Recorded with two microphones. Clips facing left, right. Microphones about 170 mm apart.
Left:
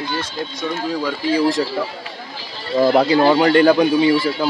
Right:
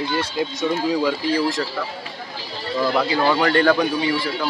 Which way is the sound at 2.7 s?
45° left (ahead or behind).